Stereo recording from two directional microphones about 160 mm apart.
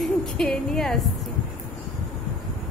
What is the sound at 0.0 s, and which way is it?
Music, centre (ahead or behind).